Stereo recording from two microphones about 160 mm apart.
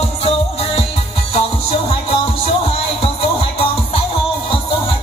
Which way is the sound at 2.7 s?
35° left (ahead or behind).